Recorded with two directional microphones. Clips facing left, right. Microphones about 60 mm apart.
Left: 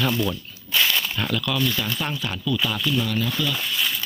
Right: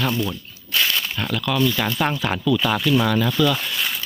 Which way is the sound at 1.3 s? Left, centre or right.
Right.